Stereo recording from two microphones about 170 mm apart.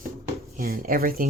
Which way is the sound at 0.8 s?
55° right (ahead or behind).